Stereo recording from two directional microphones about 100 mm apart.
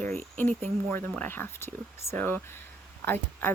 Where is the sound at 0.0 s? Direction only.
15° left (ahead or behind).